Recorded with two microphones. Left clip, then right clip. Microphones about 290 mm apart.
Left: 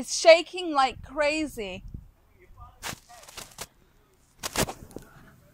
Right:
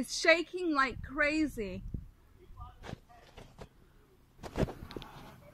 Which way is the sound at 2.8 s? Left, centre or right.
Left.